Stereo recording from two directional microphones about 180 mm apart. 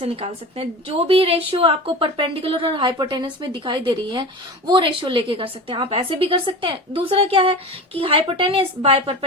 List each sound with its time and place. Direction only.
0.0 s a woman's voice: 30° right (ahead or behind)